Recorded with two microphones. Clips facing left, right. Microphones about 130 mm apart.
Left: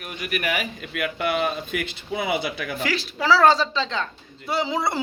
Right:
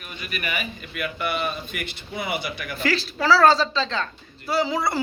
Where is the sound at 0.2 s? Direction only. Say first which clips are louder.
Left 4 dB; 85° left.